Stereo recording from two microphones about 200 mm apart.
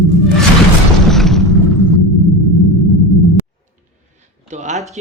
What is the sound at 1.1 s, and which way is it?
Boom, centre (ahead or behind).